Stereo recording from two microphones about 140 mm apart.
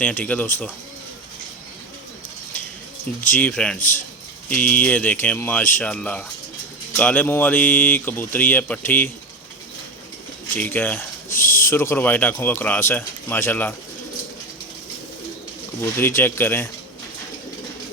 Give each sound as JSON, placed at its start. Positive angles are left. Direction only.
{"t": 0.0, "sound": "speech", "side_deg": 10}
{"t": 3.3, "sound": "speech", "side_deg": 10}
{"t": 3.8, "sound": "a man's voice", "side_deg": 65}
{"t": 4.4, "sound": "speech", "side_deg": 10}
{"t": 10.5, "sound": "speech", "side_deg": 10}
{"t": 11.3, "sound": "speech", "side_deg": 75}
{"t": 11.6, "sound": "speech", "side_deg": 15}
{"t": 15.8, "sound": "speech", "side_deg": 15}